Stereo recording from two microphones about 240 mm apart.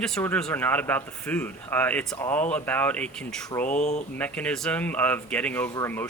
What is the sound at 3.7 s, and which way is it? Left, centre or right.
Speech, left.